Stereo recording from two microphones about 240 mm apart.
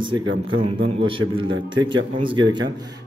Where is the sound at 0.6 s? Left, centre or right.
Right.